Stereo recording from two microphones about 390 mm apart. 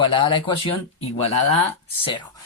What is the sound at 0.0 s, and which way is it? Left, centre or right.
Speech, centre.